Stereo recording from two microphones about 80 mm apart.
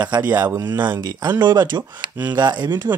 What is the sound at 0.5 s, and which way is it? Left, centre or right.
Speech, right.